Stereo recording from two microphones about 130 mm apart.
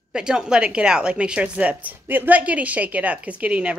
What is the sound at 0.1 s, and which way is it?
A woman's voice, 5° right (ahead or behind).